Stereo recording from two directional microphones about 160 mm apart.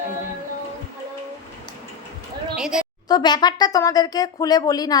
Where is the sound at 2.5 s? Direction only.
5° right (ahead or behind).